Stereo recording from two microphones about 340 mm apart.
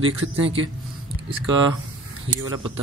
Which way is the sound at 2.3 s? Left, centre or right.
Right.